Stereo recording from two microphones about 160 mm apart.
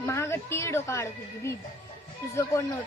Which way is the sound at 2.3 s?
20° left (ahead or behind).